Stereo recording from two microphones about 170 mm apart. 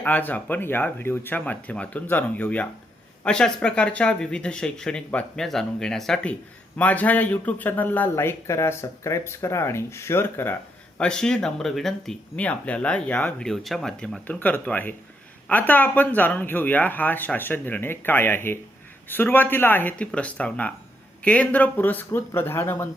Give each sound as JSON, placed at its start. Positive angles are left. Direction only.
{"t": 0.0, "sound": "speech", "side_deg": 10}